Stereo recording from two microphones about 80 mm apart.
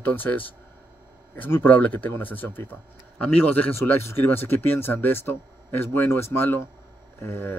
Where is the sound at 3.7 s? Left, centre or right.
Left.